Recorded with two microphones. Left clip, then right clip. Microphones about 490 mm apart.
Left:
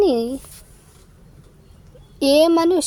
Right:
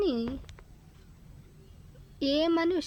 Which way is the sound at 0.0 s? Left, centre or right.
Right.